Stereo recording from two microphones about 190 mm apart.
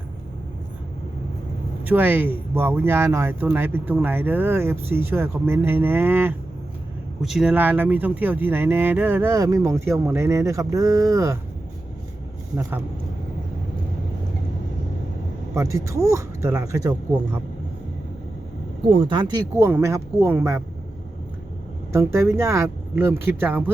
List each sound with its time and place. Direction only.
1.8 s speech: 10° right (ahead or behind)
15.5 s speech: 15° right (ahead or behind)
18.9 s speech: 25° right (ahead or behind)
19.5 s speech: 15° right (ahead or behind)
21.9 s speech: 15° right (ahead or behind)